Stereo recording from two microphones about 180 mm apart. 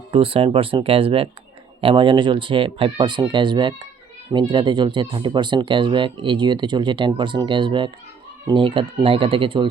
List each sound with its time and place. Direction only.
0.1 s speech: 30° right (ahead or behind)